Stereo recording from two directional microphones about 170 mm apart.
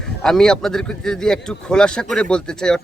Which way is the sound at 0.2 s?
5° left (ahead or behind).